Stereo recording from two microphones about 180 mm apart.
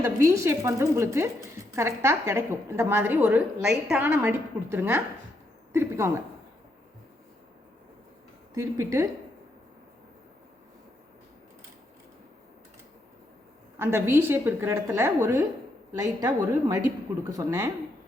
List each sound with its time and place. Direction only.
0.0 s a woman's voice: 15° right (ahead or behind)
8.5 s a woman's voice: 15° right (ahead or behind)
13.7 s a woman's voice: 15° right (ahead or behind)